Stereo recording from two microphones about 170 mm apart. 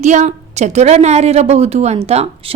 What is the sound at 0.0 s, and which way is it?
A woman's voice, 45° right (ahead or behind).